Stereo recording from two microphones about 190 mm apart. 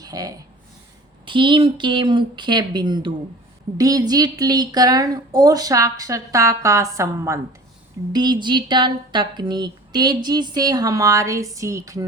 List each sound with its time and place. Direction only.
0.0 s speech: 20° right (ahead or behind)